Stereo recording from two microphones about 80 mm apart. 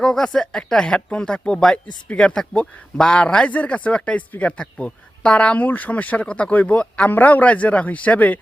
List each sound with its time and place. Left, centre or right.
0.0 s speech: centre